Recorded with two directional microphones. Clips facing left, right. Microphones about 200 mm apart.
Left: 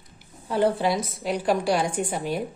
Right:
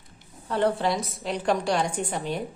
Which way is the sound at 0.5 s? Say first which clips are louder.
Left 2 dB; 5° left (ahead or behind).